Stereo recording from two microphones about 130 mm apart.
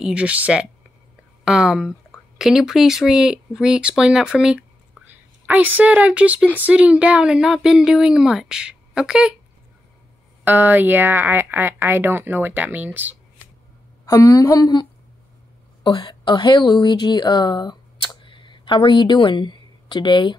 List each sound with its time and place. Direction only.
0.0 s speech: 10° right (ahead or behind)
10.4 s speech: 15° right (ahead or behind)
14.0 s a woman's voice: 25° left (ahead or behind)